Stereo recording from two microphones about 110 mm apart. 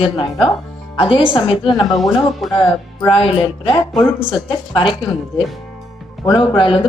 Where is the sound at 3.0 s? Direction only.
50° left (ahead or behind).